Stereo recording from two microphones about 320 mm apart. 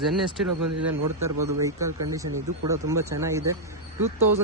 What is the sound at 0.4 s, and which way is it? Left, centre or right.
Speech, right.